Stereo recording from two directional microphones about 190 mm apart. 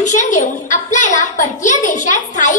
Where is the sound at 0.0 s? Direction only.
40° left (ahead or behind).